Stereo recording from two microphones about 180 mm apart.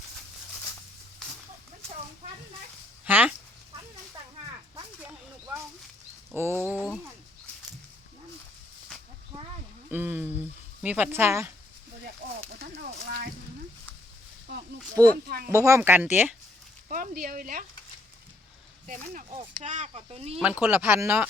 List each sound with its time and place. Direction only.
3.1 s chicken: 10° right (ahead or behind)
6.3 s speech: 10° right (ahead or behind)
9.9 s speech: 10° right (ahead or behind)
12.5 s a sound: 60° right (ahead or behind)
15.0 s speech: 15° right (ahead or behind)
16.9 s speech: 50° right (ahead or behind)
19.3 s speech: 30° right (ahead or behind)
20.4 s speech: 5° right (ahead or behind)